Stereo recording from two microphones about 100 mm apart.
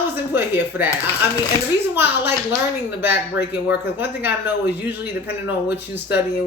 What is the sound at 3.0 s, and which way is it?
Speech, 20° right (ahead or behind).